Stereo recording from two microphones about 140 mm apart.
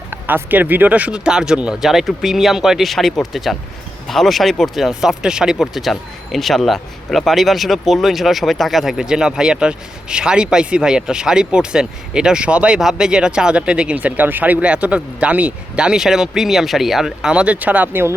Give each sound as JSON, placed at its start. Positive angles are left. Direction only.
{"t": 0.1, "sound": "speech", "side_deg": -15}